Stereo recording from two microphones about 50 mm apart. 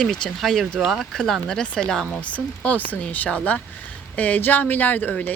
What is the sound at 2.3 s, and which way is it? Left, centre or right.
Speech, left.